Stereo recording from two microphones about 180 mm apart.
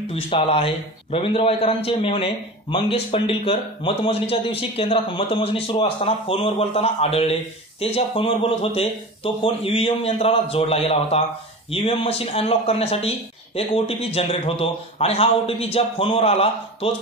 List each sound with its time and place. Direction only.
0.1 s a man's voice: 30° left (ahead or behind)